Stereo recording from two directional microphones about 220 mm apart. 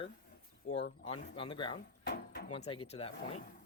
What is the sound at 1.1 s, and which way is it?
Speech, 25° left (ahead or behind).